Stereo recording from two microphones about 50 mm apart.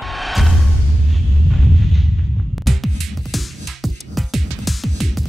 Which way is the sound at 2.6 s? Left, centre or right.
Centre.